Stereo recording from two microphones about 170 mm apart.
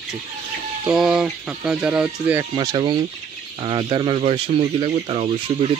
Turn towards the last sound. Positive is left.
turn(degrees=-35)  # may be behind; listen again after turning